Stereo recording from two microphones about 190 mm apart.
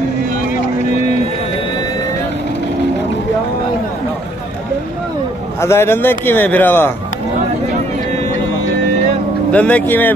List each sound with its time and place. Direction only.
5.6 s a man's voice: 15° left (ahead or behind)
9.5 s a man's voice: 5° left (ahead or behind)